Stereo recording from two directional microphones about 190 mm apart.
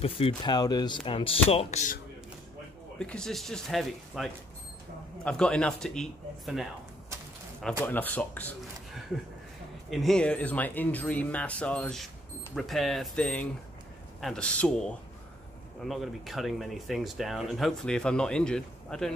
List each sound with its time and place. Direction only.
0.0 s speech: 30° left (ahead or behind)
3.0 s speech: 5° left (ahead or behind)
7.8 s speech: 10° left (ahead or behind)
9.8 s speech: 5° left (ahead or behind)